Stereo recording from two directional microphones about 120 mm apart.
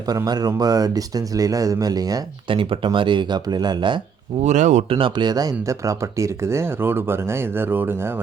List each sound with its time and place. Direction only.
0.1 s speech: 35° right (ahead or behind)
2.5 s speech: 45° right (ahead or behind)
4.4 s speech: 80° right
4.9 s speech: 45° right (ahead or behind); by 8.2 s 20° right (ahead or behind)